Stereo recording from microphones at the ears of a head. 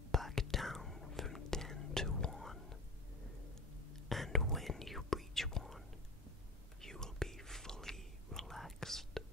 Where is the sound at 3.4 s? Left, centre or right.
Left.